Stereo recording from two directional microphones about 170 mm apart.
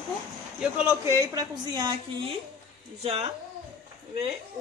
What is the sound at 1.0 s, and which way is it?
Dishes, 20° right (ahead or behind).